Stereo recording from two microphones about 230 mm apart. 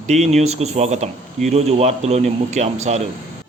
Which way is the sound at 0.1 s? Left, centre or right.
Right.